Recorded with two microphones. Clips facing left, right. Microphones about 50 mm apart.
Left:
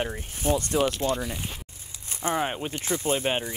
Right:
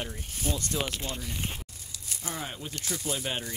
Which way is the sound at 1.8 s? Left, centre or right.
Left.